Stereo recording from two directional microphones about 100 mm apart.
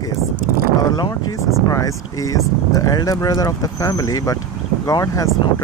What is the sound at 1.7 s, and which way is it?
Speech, 35° left (ahead or behind).